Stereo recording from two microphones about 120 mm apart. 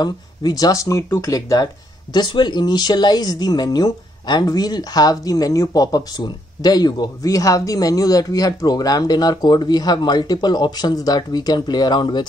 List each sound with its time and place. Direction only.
0.0 s speech: 35° left (ahead or behind)